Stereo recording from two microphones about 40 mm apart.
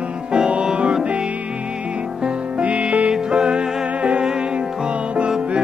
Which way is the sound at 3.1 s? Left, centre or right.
Centre.